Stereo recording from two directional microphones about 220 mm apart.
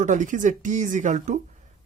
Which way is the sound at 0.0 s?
35° right (ahead or behind).